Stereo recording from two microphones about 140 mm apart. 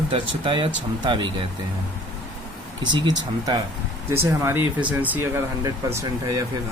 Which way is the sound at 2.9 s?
30° right (ahead or behind).